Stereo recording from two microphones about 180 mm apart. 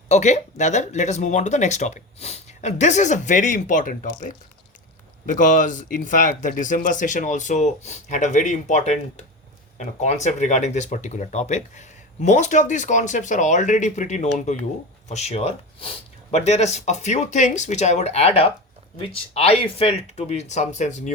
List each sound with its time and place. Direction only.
0.1 s speech: 40° left (ahead or behind)